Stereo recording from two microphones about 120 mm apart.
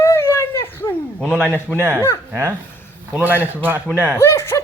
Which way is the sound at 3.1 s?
15° right (ahead or behind).